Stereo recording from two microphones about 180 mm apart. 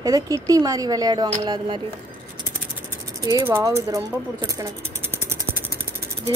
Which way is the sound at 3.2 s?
20° right (ahead or behind).